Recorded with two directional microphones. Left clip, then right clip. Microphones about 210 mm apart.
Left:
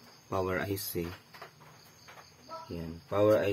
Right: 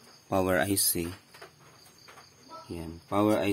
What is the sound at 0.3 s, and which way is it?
Speech, 55° right (ahead or behind).